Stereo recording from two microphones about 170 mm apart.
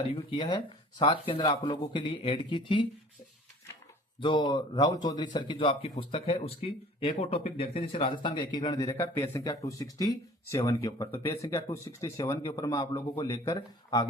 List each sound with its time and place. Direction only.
0.1 s a man's voice: 25° left (ahead or behind)
4.2 s a man's voice: 30° left (ahead or behind)